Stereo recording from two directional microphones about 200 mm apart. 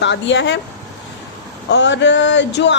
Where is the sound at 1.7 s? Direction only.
65° left (ahead or behind).